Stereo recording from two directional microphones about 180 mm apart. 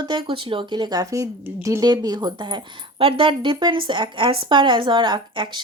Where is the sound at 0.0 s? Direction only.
25° right (ahead or behind).